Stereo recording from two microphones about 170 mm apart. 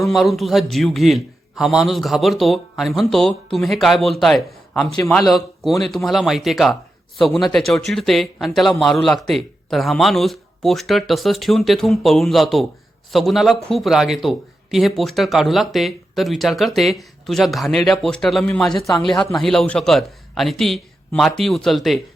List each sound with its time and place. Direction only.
0.0 s a man's voice: centre (ahead or behind)